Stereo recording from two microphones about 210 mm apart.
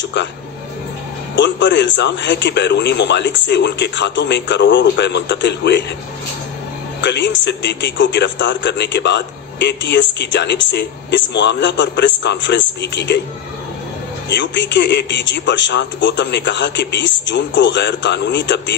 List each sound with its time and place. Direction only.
1.3 s a man's voice: 55° left (ahead or behind)
7.0 s a man's voice: 55° left (ahead or behind)
14.3 s a man's voice: 55° left (ahead or behind)